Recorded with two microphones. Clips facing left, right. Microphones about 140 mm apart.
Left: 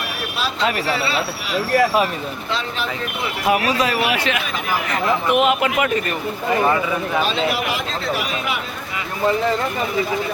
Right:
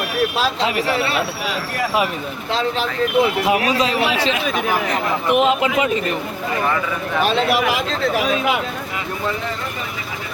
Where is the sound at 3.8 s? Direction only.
25° right (ahead or behind).